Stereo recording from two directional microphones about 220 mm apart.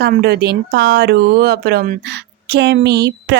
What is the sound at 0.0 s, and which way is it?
A woman's voice, 50° right (ahead or behind).